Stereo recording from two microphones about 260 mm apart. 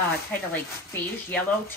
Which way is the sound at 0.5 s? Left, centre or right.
Centre.